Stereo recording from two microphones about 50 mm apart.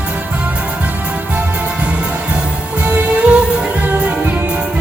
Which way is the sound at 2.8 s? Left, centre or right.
Right.